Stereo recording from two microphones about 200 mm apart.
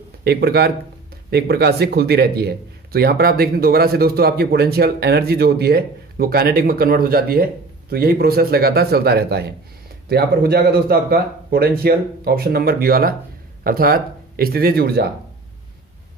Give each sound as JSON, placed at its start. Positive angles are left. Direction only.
{"t": 0.2, "sound": "a man's voice", "side_deg": -55}